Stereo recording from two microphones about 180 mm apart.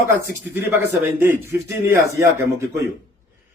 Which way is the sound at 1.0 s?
15° right (ahead or behind).